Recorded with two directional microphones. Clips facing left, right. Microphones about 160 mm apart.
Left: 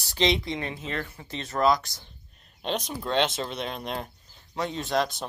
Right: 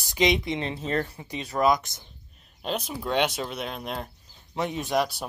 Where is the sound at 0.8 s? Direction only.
40° right (ahead or behind).